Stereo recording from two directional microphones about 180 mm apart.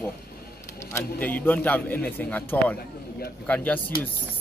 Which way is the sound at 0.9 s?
10° left (ahead or behind).